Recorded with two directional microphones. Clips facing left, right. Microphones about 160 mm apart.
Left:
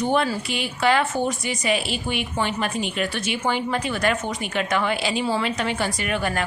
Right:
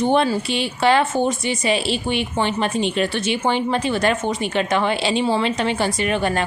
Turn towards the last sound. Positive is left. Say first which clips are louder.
# right 5 dB
turn(degrees=-25)  # may be behind; listen again after turning